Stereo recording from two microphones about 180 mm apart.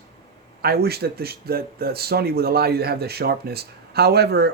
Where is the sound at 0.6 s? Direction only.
60° right (ahead or behind).